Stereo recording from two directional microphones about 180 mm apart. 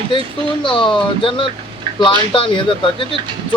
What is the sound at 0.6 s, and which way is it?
Speech, 30° left (ahead or behind).